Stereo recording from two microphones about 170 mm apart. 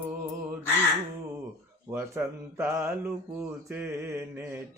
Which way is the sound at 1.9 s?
15° right (ahead or behind).